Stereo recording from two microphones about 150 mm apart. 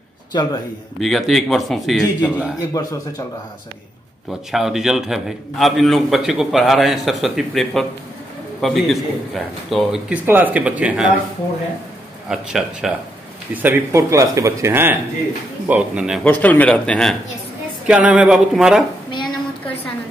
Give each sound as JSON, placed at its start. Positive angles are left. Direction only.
{"t": 0.3, "sound": "a man's voice", "side_deg": 25}
{"t": 0.9, "sound": "a man's voice", "side_deg": 0}
{"t": 2.7, "sound": "speech", "side_deg": 25}
{"t": 4.5, "sound": "a man's voice", "side_deg": 0}
{"t": 12.3, "sound": "a man's voice", "side_deg": -5}
{"t": 16.3, "sound": "speech", "side_deg": 10}
{"t": 17.8, "sound": "a man's voice", "side_deg": -10}
{"t": 19.0, "sound": "a sound", "side_deg": 30}